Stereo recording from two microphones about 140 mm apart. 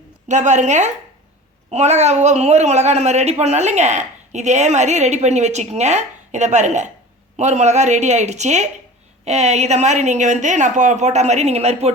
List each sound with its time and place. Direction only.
0.3 s a woman's voice: 60° right (ahead or behind)